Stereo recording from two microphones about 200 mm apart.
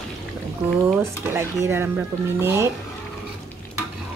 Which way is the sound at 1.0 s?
10° right (ahead or behind).